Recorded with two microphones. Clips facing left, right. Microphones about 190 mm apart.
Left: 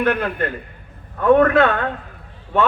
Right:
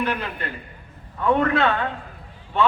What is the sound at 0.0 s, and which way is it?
A man's voice, 55° left (ahead or behind).